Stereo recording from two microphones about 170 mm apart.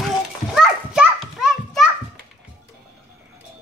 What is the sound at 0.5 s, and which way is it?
Children playing, 5° right (ahead or behind).